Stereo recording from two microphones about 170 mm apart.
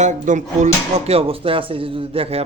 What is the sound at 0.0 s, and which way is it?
Speech, 45° right (ahead or behind).